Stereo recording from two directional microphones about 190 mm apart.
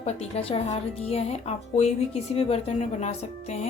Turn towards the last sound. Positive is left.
turn(degrees=35)  # may be behind; listen again after turning